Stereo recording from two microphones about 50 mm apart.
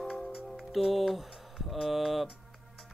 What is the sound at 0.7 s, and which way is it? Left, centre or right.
Speech, centre.